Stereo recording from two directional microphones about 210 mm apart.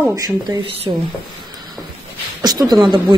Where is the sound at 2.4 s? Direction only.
20° right (ahead or behind).